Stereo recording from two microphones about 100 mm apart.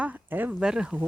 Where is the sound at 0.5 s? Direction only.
5° right (ahead or behind).